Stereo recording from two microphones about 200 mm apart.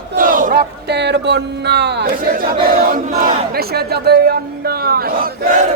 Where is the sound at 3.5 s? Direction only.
50° right (ahead or behind).